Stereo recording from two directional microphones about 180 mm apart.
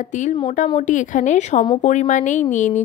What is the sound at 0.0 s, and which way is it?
Speech, 45° left (ahead or behind).